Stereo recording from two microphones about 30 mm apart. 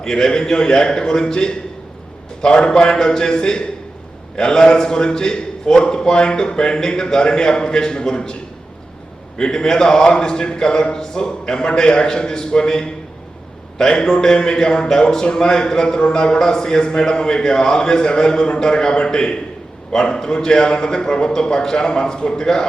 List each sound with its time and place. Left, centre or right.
0.0 s a man's voice: left
9.4 s a man's voice: left